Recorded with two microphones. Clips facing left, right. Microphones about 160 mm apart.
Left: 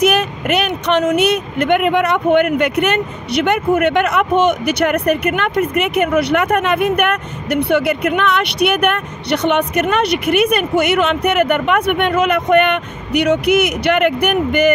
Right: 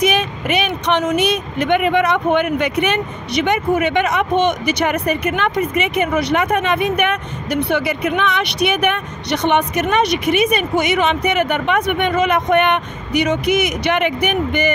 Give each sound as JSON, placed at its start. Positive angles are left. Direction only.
{"t": 0.0, "sound": "speech", "side_deg": 60}